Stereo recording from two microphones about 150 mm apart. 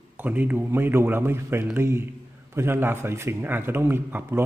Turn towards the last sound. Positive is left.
turn(degrees=-15)  # may be behind; listen again after turning